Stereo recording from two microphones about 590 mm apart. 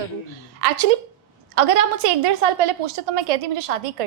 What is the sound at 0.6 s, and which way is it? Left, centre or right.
Speech, right.